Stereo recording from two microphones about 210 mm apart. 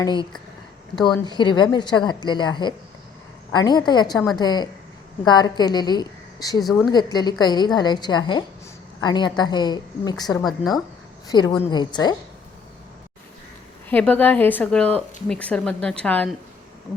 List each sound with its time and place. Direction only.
0.0 s a woman's voice: 20° left (ahead or behind)
6.6 s a woman's voice: centre (ahead or behind)
6.9 s a woman's voice: 20° left (ahead or behind)
11.3 s a woman's voice: 20° left (ahead or behind)
13.9 s a woman's voice: 5° left (ahead or behind)